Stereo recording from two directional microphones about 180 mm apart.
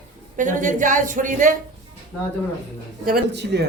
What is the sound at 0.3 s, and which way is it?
Speech, 45° right (ahead or behind).